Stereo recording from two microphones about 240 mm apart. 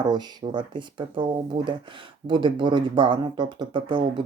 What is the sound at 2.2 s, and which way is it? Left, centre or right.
Speech, centre.